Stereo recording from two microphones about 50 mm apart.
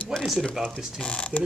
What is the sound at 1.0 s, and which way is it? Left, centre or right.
Speech, left.